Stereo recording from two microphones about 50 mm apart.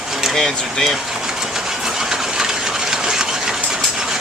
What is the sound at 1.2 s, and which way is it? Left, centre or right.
Engine, centre.